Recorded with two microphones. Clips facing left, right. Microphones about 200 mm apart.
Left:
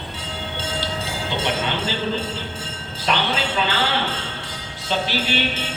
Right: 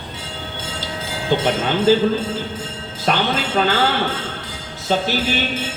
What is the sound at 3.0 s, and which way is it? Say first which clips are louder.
Speech: right 3 dB; 45° right (ahead or behind).